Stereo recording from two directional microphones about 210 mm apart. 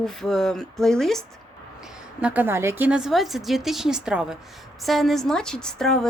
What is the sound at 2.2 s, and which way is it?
A woman's voice, 10° right (ahead or behind).